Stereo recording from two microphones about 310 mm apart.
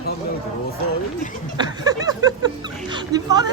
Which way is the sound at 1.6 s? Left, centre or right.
Centre.